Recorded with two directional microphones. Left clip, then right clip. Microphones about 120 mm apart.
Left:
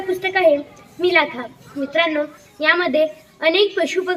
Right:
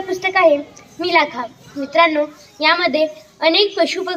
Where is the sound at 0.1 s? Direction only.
15° left (ahead or behind).